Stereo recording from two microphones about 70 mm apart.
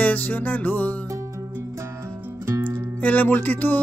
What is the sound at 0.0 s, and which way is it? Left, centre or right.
Music, left.